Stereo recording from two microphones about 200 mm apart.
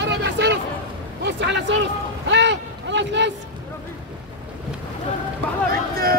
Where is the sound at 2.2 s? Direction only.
65° right (ahead or behind).